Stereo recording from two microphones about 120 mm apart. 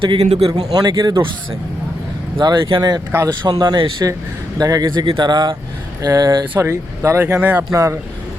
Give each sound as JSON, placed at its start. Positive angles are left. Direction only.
{"t": 0.0, "sound": "a man's voice", "side_deg": -50}
{"t": 0.6, "sound": "speech", "side_deg": -30}
{"t": 2.4, "sound": "speech", "side_deg": -40}
{"t": 6.6, "sound": "speech", "side_deg": -25}
{"t": 7.3, "sound": "speech", "side_deg": -15}
{"t": 7.7, "sound": "speech", "side_deg": -25}